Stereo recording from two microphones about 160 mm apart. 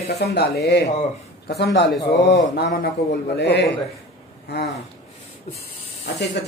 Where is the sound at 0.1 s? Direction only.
85° left.